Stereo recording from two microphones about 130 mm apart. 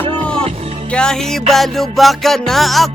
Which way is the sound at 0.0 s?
5° left (ahead or behind).